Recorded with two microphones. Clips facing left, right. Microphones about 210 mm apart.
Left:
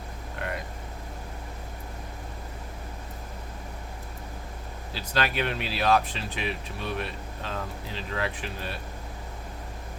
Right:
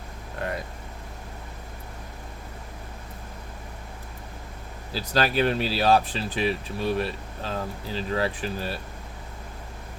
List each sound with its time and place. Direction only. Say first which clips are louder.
4.9 s speech: right 5 dB; 35° right (ahead or behind)